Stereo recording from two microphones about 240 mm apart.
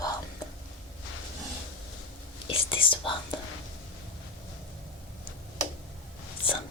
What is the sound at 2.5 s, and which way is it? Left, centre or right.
Speech, left.